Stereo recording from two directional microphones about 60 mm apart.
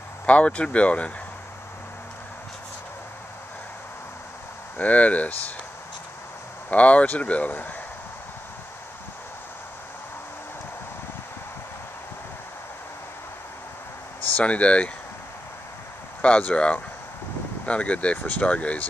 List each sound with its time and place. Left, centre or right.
0.3 s speech: left
4.7 s speech: left
6.7 s speech: left
14.3 s speech: left
16.2 s speech: left